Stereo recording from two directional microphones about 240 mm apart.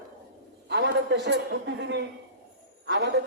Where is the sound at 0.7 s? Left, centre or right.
Right.